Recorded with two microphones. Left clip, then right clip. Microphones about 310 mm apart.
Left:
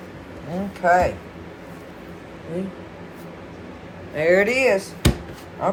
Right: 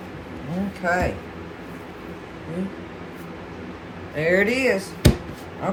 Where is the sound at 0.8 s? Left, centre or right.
Centre.